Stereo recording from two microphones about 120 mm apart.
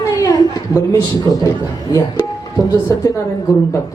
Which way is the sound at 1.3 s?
30° left (ahead or behind).